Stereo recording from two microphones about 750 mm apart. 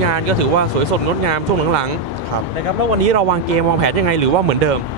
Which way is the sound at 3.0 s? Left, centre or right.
Right.